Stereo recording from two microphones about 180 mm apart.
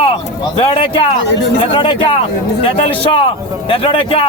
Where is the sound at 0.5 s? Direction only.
30° left (ahead or behind).